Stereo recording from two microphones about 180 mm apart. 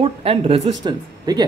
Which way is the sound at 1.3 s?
20° right (ahead or behind).